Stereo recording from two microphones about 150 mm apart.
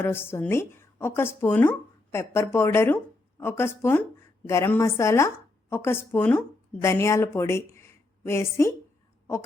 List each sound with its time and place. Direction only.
0.0 s a woman's voice: 15° left (ahead or behind)